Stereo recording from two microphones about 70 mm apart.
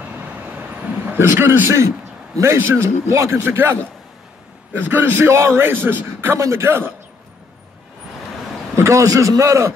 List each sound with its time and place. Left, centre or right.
0.3 s vehicle: right
1.4 s a man's voice: right
1.7 s a man's voice: right
4.7 s a man's voice: right
8.7 s a man's voice: right